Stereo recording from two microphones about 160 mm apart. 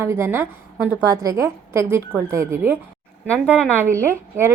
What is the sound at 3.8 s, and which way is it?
Speech, 15° right (ahead or behind).